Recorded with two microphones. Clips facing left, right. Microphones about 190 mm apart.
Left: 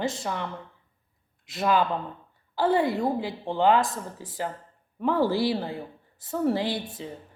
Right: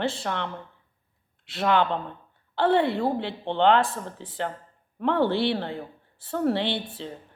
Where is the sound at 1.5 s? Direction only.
5° left (ahead or behind).